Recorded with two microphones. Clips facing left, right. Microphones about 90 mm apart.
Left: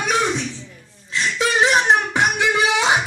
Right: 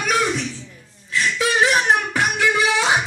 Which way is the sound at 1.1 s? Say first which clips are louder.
Even; 25° left (ahead or behind).